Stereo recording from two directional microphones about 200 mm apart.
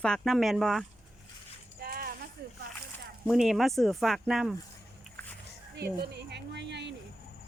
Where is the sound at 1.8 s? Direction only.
50° right (ahead or behind).